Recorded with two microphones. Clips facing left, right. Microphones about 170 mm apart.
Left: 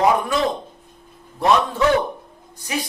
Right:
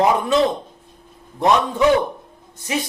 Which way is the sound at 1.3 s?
20° right (ahead or behind).